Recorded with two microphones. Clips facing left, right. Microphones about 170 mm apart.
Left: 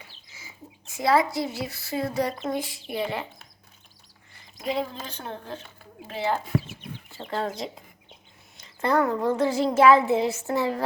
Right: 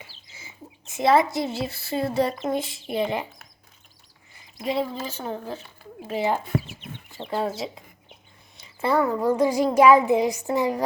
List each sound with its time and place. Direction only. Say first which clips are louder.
0.1 s speech: right 1 dB; 25° right (ahead or behind)
4.6 s a child's voice: right 3 dB; centre (ahead or behind)